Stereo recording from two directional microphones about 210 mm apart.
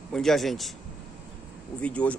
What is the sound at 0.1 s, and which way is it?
Speech, centre (ahead or behind).